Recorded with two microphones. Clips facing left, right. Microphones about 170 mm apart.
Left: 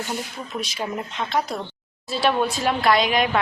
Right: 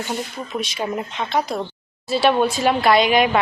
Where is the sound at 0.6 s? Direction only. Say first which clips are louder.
Right 3 dB; centre (ahead or behind).